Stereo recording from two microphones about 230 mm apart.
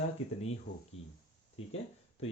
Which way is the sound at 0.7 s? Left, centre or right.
Left.